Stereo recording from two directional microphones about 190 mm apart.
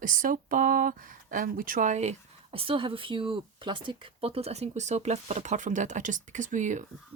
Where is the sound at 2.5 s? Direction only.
30° right (ahead or behind).